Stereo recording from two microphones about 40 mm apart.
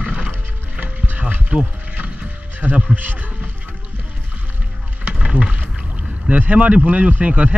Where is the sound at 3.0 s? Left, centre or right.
Right.